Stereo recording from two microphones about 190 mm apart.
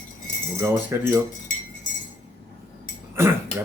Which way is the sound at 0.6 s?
10° right (ahead or behind).